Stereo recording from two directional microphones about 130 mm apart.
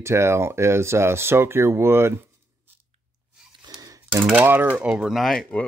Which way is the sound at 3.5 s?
30° right (ahead or behind).